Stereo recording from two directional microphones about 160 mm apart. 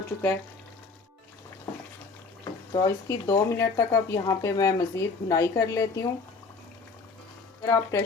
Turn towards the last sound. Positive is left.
turn(degrees=20)  # may be behind; listen again after turning